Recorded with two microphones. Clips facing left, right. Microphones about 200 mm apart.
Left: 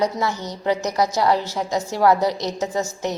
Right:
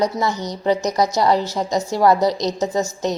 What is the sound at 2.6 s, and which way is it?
Speech, 10° left (ahead or behind).